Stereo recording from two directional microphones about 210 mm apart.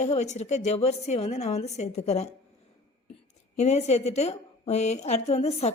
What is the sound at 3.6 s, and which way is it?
A woman's voice, 30° left (ahead or behind).